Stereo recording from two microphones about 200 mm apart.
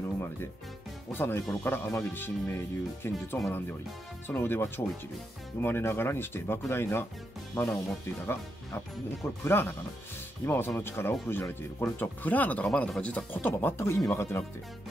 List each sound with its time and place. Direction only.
1.1 s speech: 10° left (ahead or behind)